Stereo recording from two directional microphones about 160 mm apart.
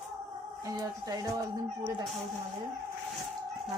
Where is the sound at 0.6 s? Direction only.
25° right (ahead or behind).